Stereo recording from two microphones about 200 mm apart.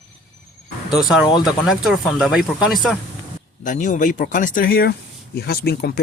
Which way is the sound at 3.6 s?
40° left (ahead or behind).